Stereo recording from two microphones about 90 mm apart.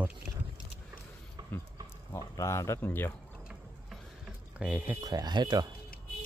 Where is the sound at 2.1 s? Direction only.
35° left (ahead or behind).